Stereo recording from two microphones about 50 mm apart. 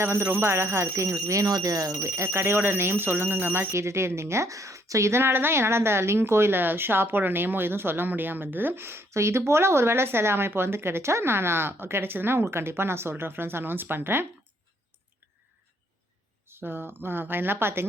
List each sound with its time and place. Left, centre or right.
0.0 s speech: right
2.0 s speech: right
2.3 s a woman's voice: right
3.5 s speech: right
5.2 s a woman's voice: right
9.0 s a woman's voice: right
16.5 s a woman's voice: right